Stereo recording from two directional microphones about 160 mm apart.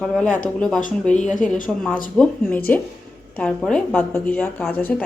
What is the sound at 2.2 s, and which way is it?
A woman's voice, 10° left (ahead or behind).